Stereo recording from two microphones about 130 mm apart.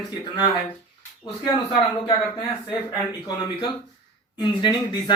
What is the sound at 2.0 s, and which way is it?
Speech, 40° left (ahead or behind).